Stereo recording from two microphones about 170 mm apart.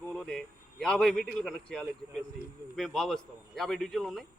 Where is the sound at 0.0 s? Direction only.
5° left (ahead or behind).